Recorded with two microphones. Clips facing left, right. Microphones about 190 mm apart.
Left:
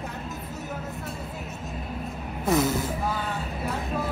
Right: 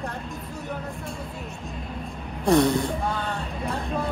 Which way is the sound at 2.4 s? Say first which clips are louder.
Right 4 dB; 5° left (ahead or behind).